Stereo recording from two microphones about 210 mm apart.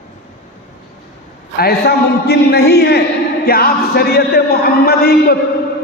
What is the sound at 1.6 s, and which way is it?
A man's voice, 50° left (ahead or behind).